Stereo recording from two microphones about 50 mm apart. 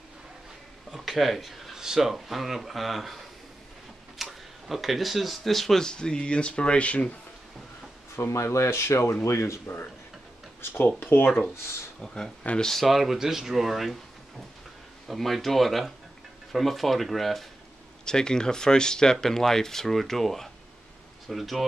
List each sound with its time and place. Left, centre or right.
0.9 s speech: centre
5.9 s speech: centre
8.2 s speech: left
8.5 s speech: left
11.0 s speech: left
12.0 s speech: centre
12.8 s speech: centre
15.0 s speech: centre
18.0 s speech: centre